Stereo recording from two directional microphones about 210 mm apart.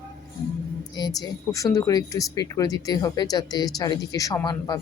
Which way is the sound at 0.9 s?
20° left (ahead or behind).